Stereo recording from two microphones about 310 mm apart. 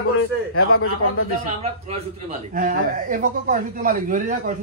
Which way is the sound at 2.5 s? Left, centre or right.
Right.